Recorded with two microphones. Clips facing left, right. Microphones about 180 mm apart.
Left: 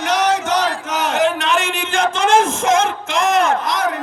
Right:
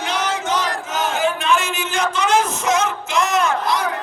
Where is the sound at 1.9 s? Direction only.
50° left (ahead or behind).